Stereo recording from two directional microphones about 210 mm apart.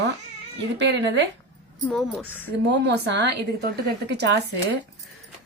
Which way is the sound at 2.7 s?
55° right (ahead or behind).